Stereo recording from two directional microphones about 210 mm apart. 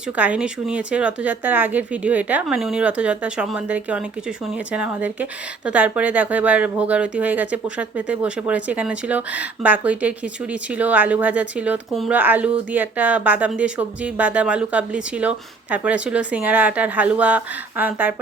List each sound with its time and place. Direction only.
0.2 s speech: 5° right (ahead or behind)